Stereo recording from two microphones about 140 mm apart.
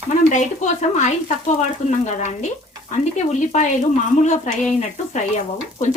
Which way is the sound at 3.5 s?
60° left (ahead or behind).